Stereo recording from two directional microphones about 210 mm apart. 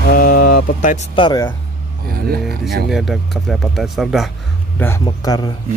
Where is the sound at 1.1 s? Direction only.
20° left (ahead or behind).